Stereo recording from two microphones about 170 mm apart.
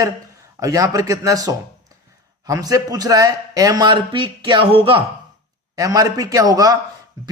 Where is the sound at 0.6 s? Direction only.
20° right (ahead or behind).